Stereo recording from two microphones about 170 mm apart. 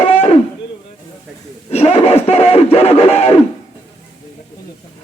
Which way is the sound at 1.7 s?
40° left (ahead or behind).